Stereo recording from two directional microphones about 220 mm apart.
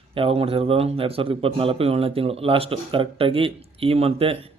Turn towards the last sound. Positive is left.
turn(degrees=-25)  # may be behind; listen again after turning